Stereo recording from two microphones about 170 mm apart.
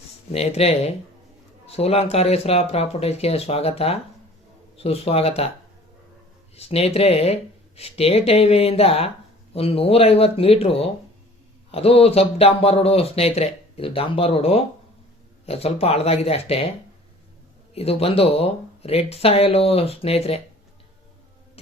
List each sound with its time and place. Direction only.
0.3 s speech: 40° left (ahead or behind)
6.6 s speech: 35° left (ahead or behind)
17.7 s speech: 35° left (ahead or behind)